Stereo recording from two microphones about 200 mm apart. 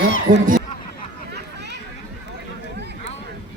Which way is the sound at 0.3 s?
40° right (ahead or behind).